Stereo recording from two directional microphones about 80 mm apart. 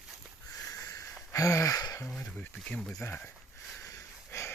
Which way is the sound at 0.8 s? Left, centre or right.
Left.